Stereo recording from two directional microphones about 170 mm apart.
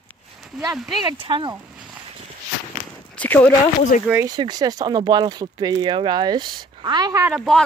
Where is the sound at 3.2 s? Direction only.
10° left (ahead or behind).